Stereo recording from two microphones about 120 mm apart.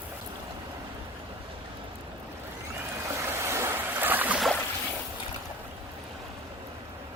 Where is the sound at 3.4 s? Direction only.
20° right (ahead or behind).